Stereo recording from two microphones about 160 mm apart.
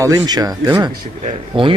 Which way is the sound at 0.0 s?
25° right (ahead or behind).